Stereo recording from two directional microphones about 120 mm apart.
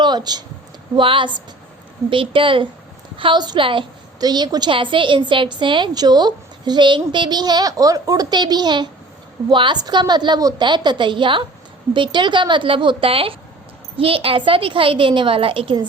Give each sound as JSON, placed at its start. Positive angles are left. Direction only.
{"t": 0.0, "sound": "a woman's voice", "side_deg": -35}
{"t": 4.2, "sound": "a woman's voice", "side_deg": -35}